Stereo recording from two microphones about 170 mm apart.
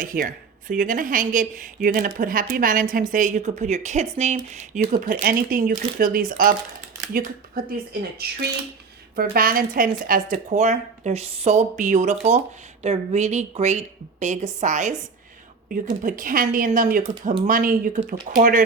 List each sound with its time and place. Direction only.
0.0 s a woman's voice: 55° right (ahead or behind)
16.0 s speech: 55° right (ahead or behind)